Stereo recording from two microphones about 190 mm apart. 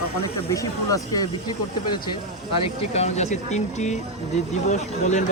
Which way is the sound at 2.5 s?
35° left (ahead or behind).